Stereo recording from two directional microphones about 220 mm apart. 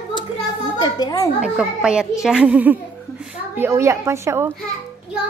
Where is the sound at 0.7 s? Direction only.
20° left (ahead or behind).